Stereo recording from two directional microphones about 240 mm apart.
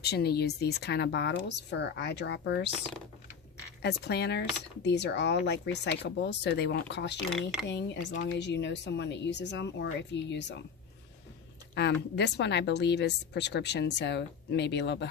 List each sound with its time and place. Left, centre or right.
0.0 s a woman's voice: left
3.8 s a woman's voice: left
11.7 s a woman's voice: left